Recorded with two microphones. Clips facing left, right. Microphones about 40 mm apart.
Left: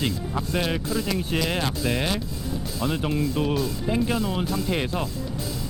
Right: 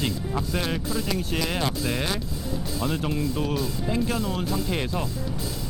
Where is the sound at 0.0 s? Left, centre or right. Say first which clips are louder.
Left 1 dB; centre.